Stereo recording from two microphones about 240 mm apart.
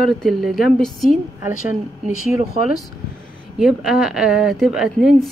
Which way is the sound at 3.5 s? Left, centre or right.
Centre.